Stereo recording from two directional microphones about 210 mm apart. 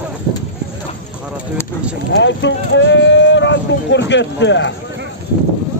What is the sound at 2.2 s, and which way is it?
Speech, 60° left (ahead or behind).